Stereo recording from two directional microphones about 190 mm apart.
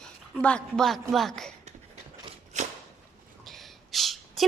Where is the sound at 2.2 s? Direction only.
40° right (ahead or behind).